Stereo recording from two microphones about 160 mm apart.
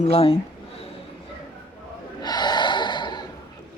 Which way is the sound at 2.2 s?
25° left (ahead or behind).